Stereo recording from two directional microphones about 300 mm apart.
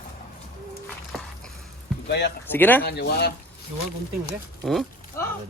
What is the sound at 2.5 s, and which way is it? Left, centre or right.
Speech, centre.